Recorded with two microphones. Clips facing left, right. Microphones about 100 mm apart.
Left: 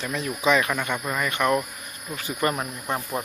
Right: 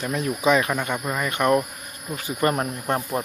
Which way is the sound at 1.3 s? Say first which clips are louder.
Right 4 dB; 30° right (ahead or behind).